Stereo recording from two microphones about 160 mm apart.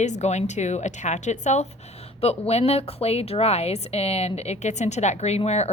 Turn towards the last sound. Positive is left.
turn(degrees=40)  # may be behind; listen again after turning